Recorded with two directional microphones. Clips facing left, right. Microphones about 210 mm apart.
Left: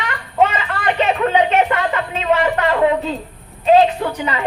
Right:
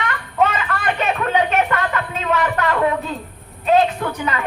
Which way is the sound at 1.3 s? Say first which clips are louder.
Left 2 dB; 25° left (ahead or behind).